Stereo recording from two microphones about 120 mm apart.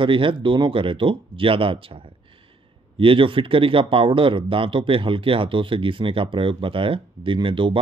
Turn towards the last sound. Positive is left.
turn(degrees=-45)  # may be behind; listen again after turning